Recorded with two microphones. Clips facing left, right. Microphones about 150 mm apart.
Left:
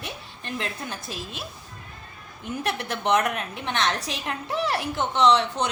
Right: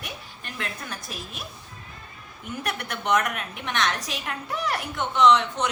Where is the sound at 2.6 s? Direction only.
30° left (ahead or behind).